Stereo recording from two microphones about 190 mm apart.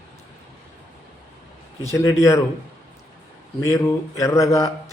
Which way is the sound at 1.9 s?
15° left (ahead or behind).